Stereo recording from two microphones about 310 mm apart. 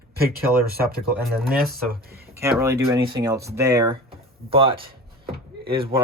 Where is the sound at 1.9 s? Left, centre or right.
Right.